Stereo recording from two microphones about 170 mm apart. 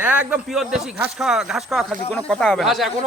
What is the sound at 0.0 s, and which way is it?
Speech, 10° right (ahead or behind).